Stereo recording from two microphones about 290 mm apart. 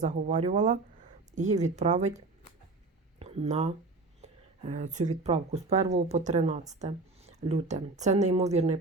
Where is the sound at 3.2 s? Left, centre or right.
Right.